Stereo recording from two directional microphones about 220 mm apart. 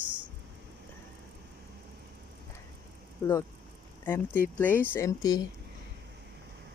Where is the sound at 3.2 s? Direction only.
15° left (ahead or behind).